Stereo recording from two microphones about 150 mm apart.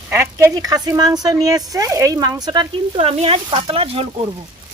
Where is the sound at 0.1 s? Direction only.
15° right (ahead or behind); by 4.1 s 40° right (ahead or behind).